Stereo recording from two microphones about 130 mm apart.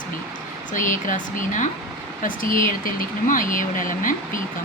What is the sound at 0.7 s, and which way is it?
Speech, 85° left.